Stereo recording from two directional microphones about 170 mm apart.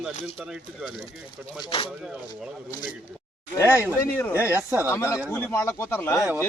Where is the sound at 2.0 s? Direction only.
5° right (ahead or behind).